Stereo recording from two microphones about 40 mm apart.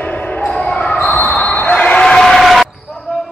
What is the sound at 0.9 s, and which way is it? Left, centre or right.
Basketball bounce, left.